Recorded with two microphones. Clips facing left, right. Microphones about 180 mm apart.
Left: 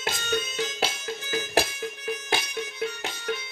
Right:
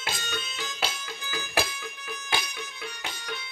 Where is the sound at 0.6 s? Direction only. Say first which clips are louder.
Left 4 dB; 25° left (ahead or behind).